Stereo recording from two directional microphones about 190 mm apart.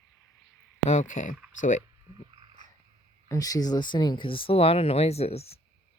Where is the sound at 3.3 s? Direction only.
20° left (ahead or behind).